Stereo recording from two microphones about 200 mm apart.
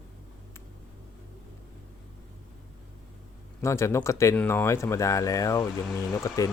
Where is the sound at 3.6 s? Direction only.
15° left (ahead or behind).